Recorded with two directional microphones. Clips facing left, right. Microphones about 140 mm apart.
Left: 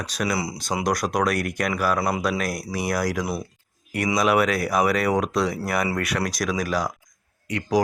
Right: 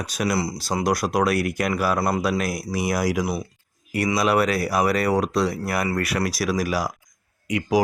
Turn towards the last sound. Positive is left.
turn(degrees=-10)  # may be behind; listen again after turning